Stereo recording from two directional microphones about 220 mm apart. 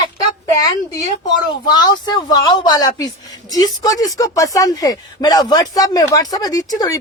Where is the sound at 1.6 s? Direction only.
20° left (ahead or behind).